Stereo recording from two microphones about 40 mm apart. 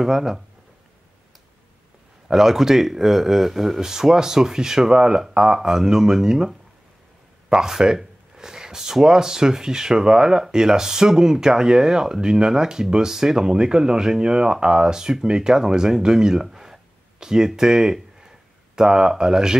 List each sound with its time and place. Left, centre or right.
0.0 s speech: centre
2.2 s speech: centre